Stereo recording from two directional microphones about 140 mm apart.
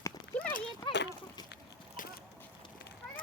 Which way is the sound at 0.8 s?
30° left (ahead or behind).